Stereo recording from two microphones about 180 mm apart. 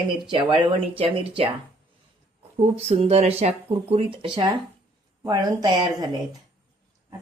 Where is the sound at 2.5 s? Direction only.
35° right (ahead or behind).